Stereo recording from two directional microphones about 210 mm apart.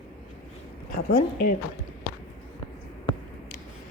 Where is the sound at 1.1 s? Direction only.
45° left (ahead or behind).